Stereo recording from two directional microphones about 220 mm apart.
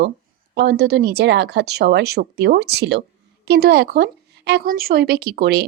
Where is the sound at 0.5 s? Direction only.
50° right (ahead or behind).